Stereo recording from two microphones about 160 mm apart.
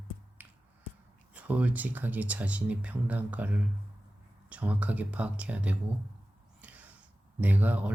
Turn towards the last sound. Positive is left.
turn(degrees=-10)  # may be behind; listen again after turning